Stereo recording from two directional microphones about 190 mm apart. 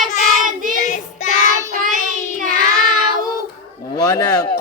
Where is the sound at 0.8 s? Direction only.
40° left (ahead or behind).